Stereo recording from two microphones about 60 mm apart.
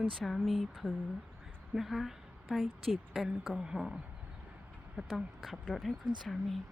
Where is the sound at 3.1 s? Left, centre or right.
Centre.